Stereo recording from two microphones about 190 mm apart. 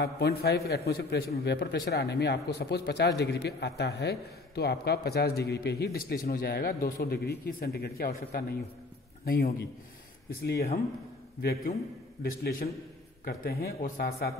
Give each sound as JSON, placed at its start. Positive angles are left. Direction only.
{"t": 0.0, "sound": "a man's voice", "side_deg": 55}
{"t": 12.2, "sound": "a man's voice", "side_deg": 50}